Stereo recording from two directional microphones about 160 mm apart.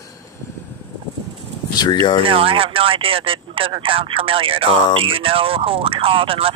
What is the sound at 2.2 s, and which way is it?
Speech, 35° right (ahead or behind).